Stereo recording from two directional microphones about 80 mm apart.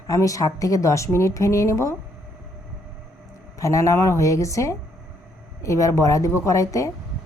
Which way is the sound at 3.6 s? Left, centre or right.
Left.